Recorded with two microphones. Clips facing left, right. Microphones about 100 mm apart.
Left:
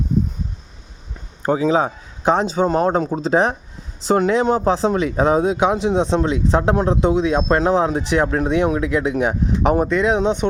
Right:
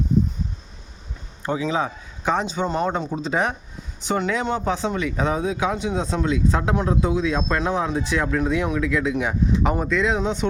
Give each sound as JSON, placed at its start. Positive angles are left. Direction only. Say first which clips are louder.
{"t": 1.5, "sound": "speech", "louder": "left 6 dB", "side_deg": 40}